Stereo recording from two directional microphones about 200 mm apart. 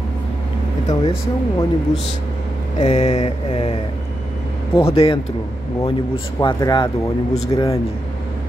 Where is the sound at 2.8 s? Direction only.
35° left (ahead or behind).